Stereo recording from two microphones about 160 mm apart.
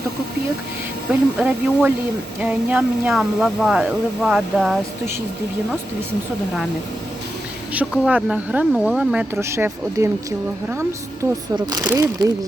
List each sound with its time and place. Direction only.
1.1 s speech: 10° right (ahead or behind)
7.7 s speech: 10° right (ahead or behind)